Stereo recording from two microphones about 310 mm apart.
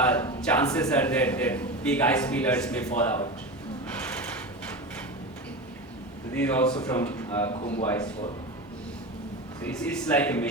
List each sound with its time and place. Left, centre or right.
0.0 s a man's voice: centre
6.3 s a man's voice: centre
9.6 s a man's voice: centre